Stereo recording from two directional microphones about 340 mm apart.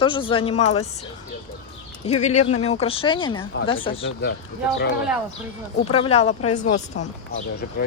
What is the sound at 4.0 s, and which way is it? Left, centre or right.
Speech, left.